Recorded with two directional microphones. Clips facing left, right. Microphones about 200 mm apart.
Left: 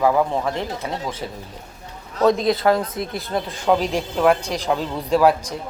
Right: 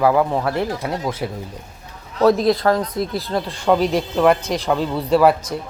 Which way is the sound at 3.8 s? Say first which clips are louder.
Right 4 dB; 35° right (ahead or behind).